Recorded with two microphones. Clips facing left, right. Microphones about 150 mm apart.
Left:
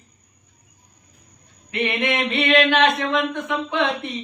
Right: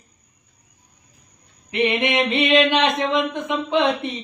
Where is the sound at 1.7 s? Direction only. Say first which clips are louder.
Right 3 dB; 20° right (ahead or behind).